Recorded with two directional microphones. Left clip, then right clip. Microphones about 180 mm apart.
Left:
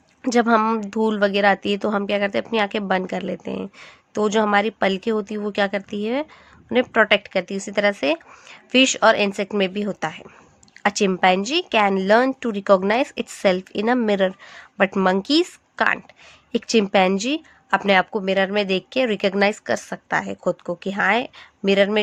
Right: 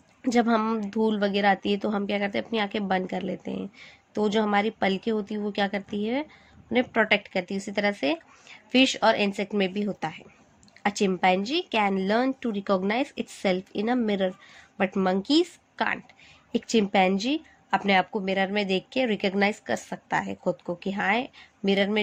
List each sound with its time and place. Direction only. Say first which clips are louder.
0.2 s speech: left 6 dB; 30° left (ahead or behind)